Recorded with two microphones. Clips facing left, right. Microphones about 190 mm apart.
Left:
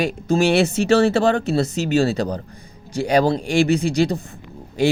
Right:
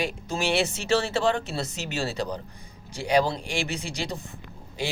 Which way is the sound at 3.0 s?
45° left (ahead or behind).